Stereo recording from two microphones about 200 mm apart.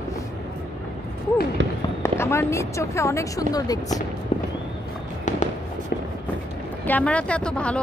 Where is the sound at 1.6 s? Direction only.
65° right (ahead or behind).